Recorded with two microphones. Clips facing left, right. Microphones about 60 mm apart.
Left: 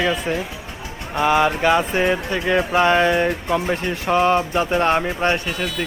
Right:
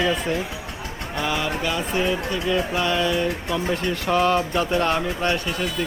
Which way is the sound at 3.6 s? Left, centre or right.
Left.